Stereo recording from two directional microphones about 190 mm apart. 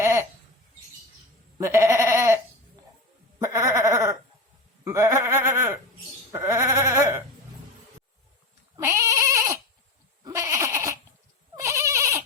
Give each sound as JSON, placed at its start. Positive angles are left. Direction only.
{"t": 0.0, "sound": "a sound", "side_deg": -15}
{"t": 1.5, "sound": "sheep", "side_deg": -15}
{"t": 3.3, "sound": "bleat", "side_deg": -15}
{"t": 4.8, "sound": "a sound", "side_deg": -15}
{"t": 6.3, "sound": "sheep", "side_deg": -15}
{"t": 8.7, "sound": "goat", "side_deg": -15}
{"t": 10.2, "sound": "bleat", "side_deg": -15}
{"t": 11.5, "sound": "goat", "side_deg": -15}